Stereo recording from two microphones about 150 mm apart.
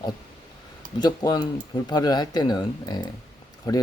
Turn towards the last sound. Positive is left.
turn(degrees=25)  # may be behind; listen again after turning